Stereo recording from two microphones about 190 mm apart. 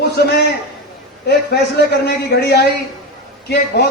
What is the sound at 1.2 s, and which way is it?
A man's voice, 60° left (ahead or behind).